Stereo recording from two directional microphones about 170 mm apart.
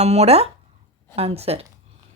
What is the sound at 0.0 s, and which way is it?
Speech, 40° right (ahead or behind).